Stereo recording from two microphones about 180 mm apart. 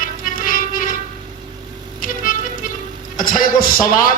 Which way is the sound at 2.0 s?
50° left (ahead or behind).